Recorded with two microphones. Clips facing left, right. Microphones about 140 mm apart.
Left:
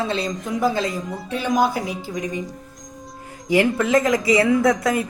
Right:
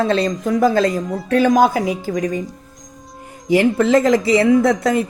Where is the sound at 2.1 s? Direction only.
90° right.